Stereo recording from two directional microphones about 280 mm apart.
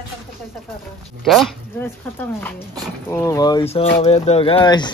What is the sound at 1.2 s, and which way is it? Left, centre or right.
Speech, centre.